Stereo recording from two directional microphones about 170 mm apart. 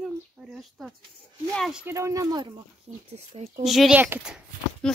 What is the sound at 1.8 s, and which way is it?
Speech, 15° right (ahead or behind).